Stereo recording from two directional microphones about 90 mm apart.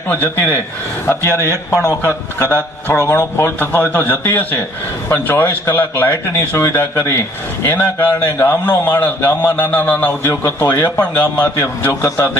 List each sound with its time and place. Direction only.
0.1 s speech: 25° left (ahead or behind)
1.3 s speech: 30° right (ahead or behind)
1.8 s a man's voice: 35° left (ahead or behind)
2.5 s speech: 20° left (ahead or behind)
3.1 s speech: 30° left (ahead or behind)
10.4 s speech: 30° left (ahead or behind)
11.8 s a man's voice: 30° left (ahead or behind)